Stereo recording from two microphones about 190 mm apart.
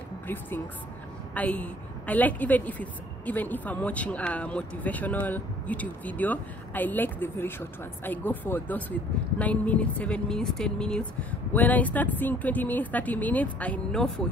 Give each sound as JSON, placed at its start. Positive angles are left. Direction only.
{"t": 1.3, "sound": "a woman's voice", "side_deg": 10}